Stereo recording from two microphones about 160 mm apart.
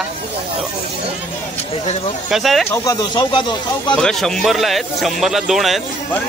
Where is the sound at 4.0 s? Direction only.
5° left (ahead or behind).